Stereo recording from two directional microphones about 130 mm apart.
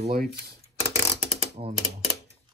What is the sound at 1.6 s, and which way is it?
Speech, 50° right (ahead or behind).